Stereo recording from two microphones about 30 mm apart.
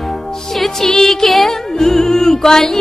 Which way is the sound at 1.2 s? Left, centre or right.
Centre.